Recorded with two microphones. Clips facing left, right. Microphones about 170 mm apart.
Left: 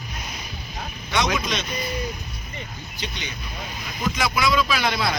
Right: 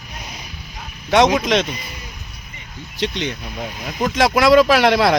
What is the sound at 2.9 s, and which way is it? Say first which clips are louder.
Speech: right 12 dB; 90° right.